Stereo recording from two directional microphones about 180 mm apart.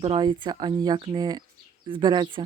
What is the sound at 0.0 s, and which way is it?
Speech, 30° right (ahead or behind).